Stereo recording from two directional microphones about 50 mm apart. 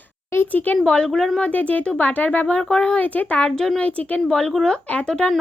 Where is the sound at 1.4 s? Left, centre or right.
Left.